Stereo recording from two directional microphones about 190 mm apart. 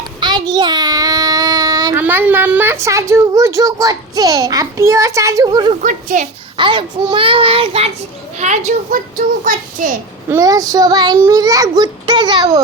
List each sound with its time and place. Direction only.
0.2 s a child's voice: 20° right (ahead or behind)
5.8 s a child's voice: 40° right (ahead or behind)
6.6 s a child's voice: 25° right (ahead or behind); by 9.9 s 45° right (ahead or behind)
10.2 s a child's voice: 15° right (ahead or behind)